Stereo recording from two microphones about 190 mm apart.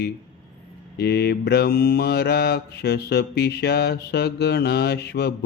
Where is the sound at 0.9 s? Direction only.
60° left (ahead or behind).